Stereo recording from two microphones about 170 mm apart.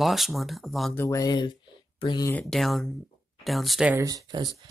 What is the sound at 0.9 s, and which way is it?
Speech, 15° left (ahead or behind).